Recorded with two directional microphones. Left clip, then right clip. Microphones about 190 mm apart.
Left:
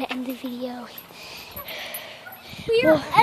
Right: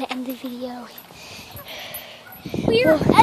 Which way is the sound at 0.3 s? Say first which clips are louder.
Right 1 dB; centre (ahead or behind).